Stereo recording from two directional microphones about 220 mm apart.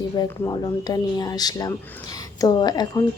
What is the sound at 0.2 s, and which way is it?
A woman's voice, 20° left (ahead or behind).